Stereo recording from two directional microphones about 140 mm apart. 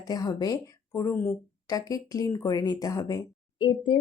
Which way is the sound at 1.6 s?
25° left (ahead or behind).